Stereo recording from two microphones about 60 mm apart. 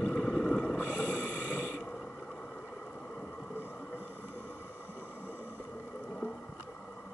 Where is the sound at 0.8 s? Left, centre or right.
Right.